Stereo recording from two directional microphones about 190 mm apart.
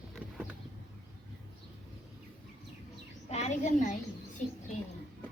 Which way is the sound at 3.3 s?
35° left (ahead or behind).